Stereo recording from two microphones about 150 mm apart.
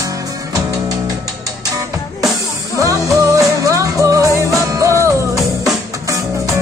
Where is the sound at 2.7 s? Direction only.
20° right (ahead or behind).